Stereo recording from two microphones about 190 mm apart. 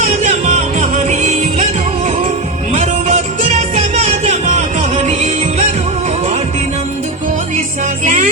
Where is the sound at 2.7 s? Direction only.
35° right (ahead or behind).